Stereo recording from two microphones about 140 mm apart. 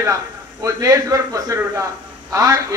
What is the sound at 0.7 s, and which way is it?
A man's voice, 25° right (ahead or behind).